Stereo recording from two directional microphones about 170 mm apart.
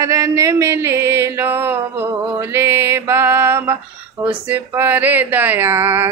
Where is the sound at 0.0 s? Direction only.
20° right (ahead or behind).